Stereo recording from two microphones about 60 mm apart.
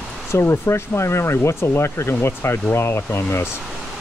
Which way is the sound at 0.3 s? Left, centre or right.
Left.